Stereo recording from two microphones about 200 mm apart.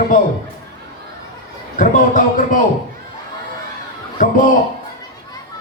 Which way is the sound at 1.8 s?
40° left (ahead or behind).